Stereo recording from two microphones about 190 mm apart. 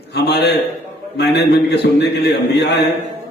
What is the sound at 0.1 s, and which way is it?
A man's voice, 60° left (ahead or behind).